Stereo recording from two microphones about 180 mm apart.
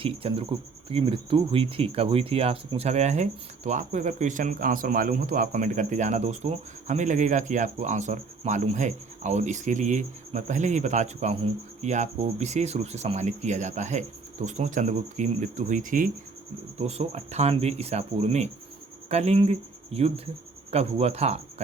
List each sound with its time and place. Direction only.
0.0 s speech: 30° right (ahead or behind); by 16.0 s 50° right (ahead or behind)
16.8 s speech: 35° right (ahead or behind)